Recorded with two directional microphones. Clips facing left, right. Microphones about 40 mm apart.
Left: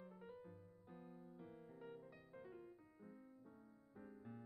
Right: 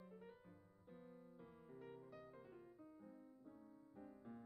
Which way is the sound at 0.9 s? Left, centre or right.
Centre.